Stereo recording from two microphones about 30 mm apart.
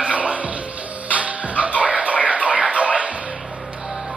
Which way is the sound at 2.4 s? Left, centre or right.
Right.